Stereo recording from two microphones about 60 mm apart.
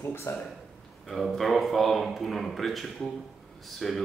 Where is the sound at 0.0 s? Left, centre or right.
Left.